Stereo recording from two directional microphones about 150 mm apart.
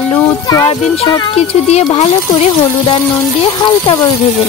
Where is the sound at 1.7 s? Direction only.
45° left (ahead or behind).